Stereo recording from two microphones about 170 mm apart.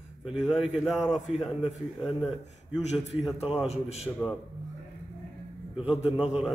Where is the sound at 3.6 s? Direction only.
40° left (ahead or behind).